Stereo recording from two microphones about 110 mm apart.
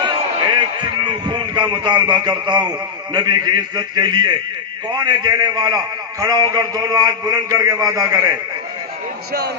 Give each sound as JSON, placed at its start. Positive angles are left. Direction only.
{"t": 0.0, "sound": "a man's voice", "side_deg": -40}